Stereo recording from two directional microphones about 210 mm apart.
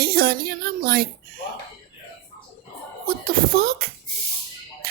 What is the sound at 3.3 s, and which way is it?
Speech, 45° right (ahead or behind).